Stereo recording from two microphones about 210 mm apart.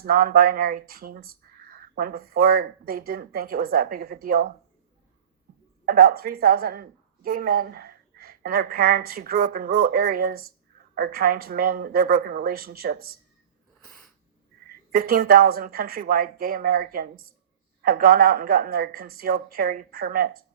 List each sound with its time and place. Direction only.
0.0 s a woman's voice: 45° right (ahead or behind)
5.8 s a woman's voice: 45° right (ahead or behind)
13.8 s sneeze: centre (ahead or behind)
14.9 s a woman's voice: 45° right (ahead or behind)